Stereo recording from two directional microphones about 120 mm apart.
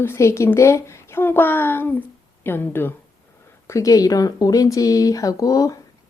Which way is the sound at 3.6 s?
30° left (ahead or behind).